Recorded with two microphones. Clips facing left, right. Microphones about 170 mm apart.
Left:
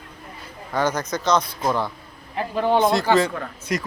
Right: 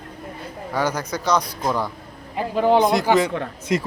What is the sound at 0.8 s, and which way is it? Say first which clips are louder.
A man's voice: left 1 dB; 10° right (ahead or behind).